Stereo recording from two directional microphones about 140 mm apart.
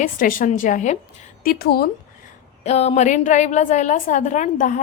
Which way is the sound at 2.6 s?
50° left (ahead or behind).